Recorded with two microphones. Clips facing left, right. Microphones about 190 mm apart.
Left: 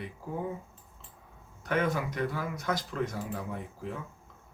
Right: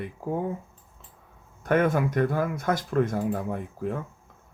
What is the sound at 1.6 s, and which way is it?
Speech, 50° right (ahead or behind).